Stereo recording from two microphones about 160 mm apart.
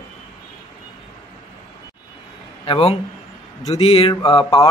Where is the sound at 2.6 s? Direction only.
35° left (ahead or behind).